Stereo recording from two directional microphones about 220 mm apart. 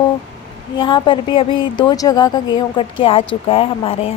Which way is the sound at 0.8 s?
20° left (ahead or behind).